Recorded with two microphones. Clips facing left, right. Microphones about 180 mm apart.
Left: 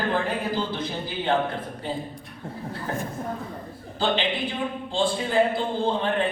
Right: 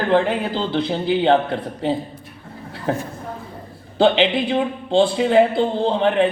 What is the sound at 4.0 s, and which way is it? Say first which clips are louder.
Speech: right 9 dB; 70° right (ahead or behind).